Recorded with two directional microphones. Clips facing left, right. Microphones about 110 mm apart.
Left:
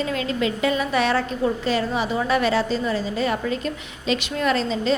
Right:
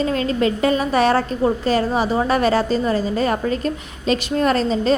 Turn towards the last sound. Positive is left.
turn(degrees=-45)  # may be behind; listen again after turning